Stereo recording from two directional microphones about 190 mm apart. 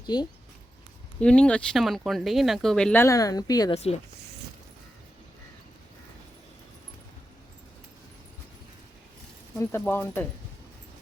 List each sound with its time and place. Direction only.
0.0 s speech: 20° left (ahead or behind)
1.2 s speech: 5° left (ahead or behind)
9.6 s speech: 10° left (ahead or behind)